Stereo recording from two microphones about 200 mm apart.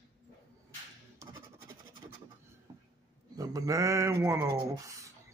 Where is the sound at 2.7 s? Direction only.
20° right (ahead or behind).